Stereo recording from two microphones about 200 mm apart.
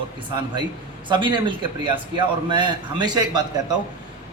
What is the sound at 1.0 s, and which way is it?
A man's voice, 25° right (ahead or behind).